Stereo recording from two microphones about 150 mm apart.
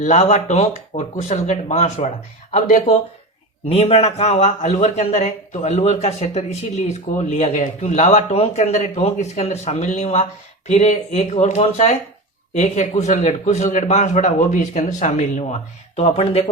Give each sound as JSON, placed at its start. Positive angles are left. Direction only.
{"t": 0.0, "sound": "speech", "side_deg": 50}
{"t": 3.7, "sound": "speech", "side_deg": 40}